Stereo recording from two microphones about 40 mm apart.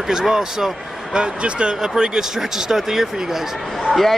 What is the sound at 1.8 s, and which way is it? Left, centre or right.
Speech, centre.